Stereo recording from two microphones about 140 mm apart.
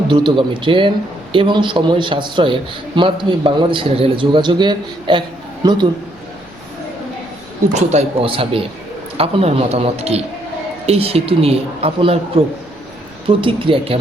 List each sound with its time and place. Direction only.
0.1 s a man's voice: 35° right (ahead or behind)
7.7 s a woman's voice: 55° right (ahead or behind)
13.2 s speech: 40° right (ahead or behind)